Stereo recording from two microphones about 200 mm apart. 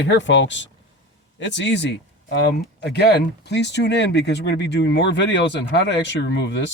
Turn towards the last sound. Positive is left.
turn(degrees=60)  # may be behind; listen again after turning